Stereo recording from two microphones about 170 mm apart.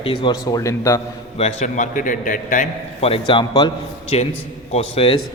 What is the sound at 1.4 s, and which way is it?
A man's voice, 40° left (ahead or behind).